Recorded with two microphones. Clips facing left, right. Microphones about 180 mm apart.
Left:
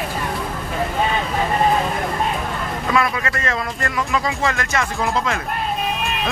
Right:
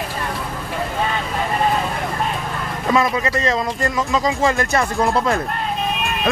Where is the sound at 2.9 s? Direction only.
20° right (ahead or behind).